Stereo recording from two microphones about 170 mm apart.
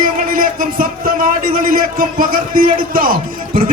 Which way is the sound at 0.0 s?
55° right (ahead or behind).